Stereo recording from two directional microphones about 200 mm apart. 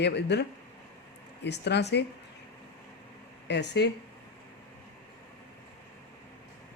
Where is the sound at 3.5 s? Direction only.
60° left (ahead or behind).